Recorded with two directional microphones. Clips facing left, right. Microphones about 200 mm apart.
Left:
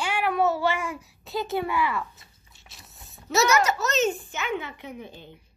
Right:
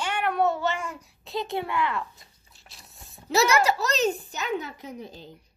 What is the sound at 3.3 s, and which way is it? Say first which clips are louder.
A child's voice: even; 30° right (ahead or behind).